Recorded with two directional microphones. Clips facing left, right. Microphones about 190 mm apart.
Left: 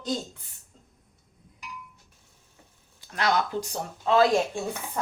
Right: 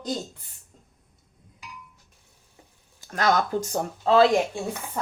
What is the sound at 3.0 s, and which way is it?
Speech, 45° right (ahead or behind).